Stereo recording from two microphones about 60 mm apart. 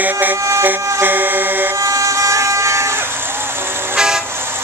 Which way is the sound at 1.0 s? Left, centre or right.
Right.